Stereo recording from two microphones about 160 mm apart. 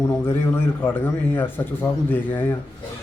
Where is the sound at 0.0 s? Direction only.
15° left (ahead or behind).